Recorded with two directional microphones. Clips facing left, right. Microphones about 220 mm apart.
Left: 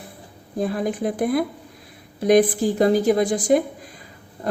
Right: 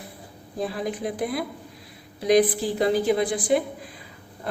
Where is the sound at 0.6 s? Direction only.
50° left (ahead or behind).